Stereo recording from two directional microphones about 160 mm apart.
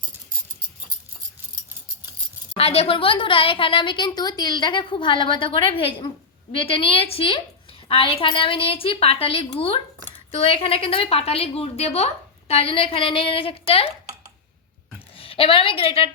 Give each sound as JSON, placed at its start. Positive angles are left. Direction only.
{"t": 2.6, "sound": "a woman's voice", "side_deg": 40}
{"t": 15.1, "sound": "a woman's voice", "side_deg": 35}